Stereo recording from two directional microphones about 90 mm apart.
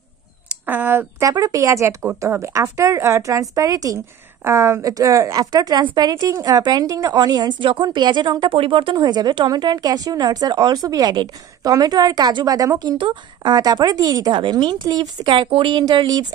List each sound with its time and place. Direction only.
0.7 s speech: 20° right (ahead or behind)
1.2 s a woman's voice: 40° right (ahead or behind)
6.2 s speech: 40° right (ahead or behind)
8.5 s speech: 75° right (ahead or behind)
8.9 s speech: 50° right (ahead or behind)
14.3 s speech: 65° right (ahead or behind)
15.8 s speech: 45° right (ahead or behind)